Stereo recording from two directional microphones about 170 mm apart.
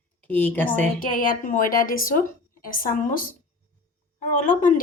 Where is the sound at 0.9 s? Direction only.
55° left (ahead or behind).